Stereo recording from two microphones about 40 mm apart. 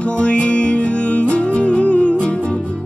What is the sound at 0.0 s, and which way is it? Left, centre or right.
Music, left.